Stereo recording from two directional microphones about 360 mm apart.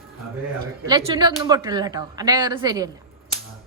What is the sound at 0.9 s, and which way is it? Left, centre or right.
A woman's voice, centre.